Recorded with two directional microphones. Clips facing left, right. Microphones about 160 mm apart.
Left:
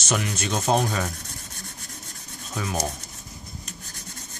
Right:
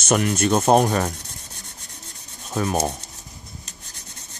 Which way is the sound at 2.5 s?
50° right (ahead or behind).